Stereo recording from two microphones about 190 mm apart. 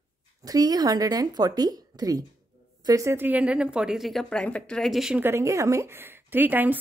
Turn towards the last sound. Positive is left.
turn(degrees=-10)  # may be behind; listen again after turning